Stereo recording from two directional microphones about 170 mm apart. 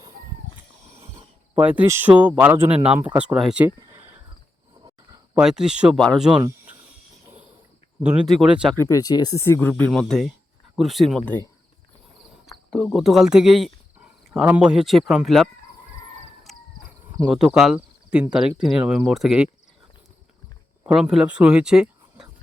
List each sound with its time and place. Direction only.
1.5 s speech: 10° right (ahead or behind)
3.8 s a sound: 20° right (ahead or behind)
5.3 s speech: 5° right (ahead or behind)
8.0 s speech: 5° right (ahead or behind)
8.7 s speech: 15° left (ahead or behind); by 11.3 s centre (ahead or behind)
12.5 s speech: centre (ahead or behind)
16.5 s a sound: centre (ahead or behind)
17.2 s speech: 5° right (ahead or behind)
20.8 s speech: 5° right (ahead or behind)